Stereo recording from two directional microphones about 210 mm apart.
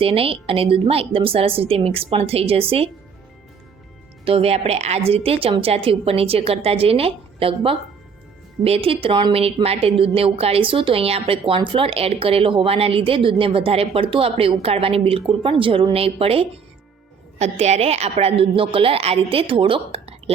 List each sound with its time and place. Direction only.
0.0 s a woman's voice: 25° right (ahead or behind)
4.3 s a woman's voice: 30° right (ahead or behind)